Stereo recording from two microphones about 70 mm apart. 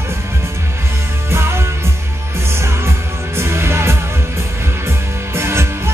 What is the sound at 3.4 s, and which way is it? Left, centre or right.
Music, right.